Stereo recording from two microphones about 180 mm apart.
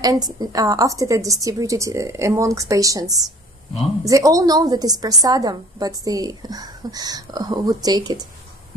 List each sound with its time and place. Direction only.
0.0 s a woman's voice: 20° right (ahead or behind)